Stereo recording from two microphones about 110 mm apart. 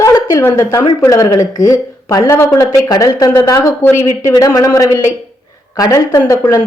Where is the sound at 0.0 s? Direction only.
25° left (ahead or behind).